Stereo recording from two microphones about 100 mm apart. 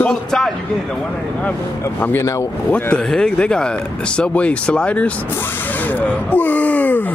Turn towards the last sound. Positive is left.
turn(degrees=15)  # may be behind; listen again after turning